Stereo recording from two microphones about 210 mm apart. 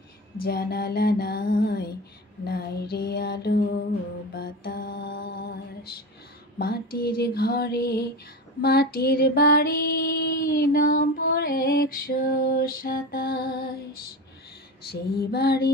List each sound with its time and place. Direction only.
0.5 s female singing: 45° left (ahead or behind)
4.4 s music: 50° left (ahead or behind)
6.6 s female singing: 45° left (ahead or behind)
14.9 s female singing: 50° left (ahead or behind)